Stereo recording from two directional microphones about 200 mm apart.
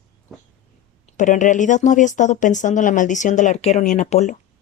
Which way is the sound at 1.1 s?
40° left (ahead or behind).